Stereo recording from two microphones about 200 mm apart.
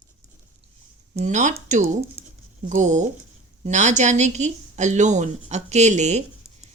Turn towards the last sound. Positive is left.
turn(degrees=-35)  # may be behind; listen again after turning